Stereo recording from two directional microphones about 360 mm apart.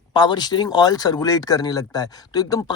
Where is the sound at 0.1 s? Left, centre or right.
Centre.